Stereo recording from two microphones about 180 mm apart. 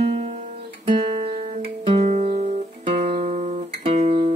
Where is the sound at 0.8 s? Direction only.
30° right (ahead or behind).